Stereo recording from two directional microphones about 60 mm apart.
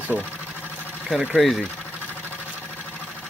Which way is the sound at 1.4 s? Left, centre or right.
Centre.